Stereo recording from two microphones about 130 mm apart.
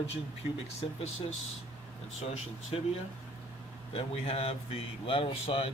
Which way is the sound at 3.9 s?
50° left (ahead or behind).